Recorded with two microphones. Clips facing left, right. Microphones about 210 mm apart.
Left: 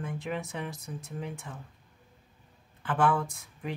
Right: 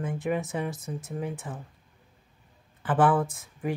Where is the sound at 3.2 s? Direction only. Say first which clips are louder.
Right 6 dB; 50° right (ahead or behind).